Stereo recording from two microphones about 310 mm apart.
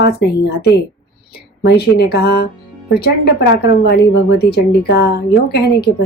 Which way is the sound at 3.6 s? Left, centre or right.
Left.